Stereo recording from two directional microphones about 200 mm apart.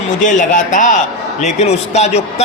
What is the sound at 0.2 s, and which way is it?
A man's voice, 40° left (ahead or behind).